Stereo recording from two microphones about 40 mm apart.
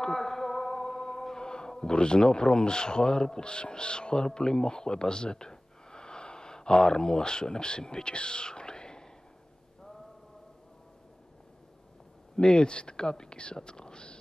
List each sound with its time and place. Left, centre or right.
0.0 s speech: centre
12.4 s speech: left